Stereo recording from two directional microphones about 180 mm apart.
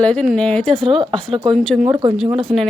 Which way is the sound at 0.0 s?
5° left (ahead or behind).